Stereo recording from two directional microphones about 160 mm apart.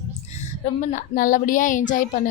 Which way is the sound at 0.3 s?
50° left (ahead or behind).